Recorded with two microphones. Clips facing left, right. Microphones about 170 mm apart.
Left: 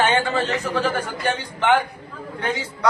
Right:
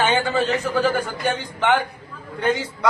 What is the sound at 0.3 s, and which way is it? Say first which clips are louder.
A man's voice: right 2 dB; centre (ahead or behind).